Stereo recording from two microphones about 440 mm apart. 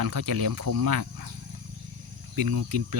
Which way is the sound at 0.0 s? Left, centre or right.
Right.